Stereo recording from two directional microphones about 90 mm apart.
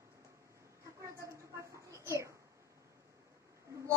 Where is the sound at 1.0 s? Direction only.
35° right (ahead or behind).